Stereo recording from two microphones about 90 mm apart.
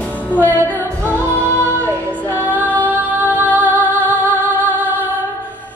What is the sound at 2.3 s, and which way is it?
Female singing, 20° right (ahead or behind).